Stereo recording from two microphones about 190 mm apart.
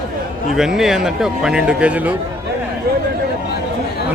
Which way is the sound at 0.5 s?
Centre (ahead or behind).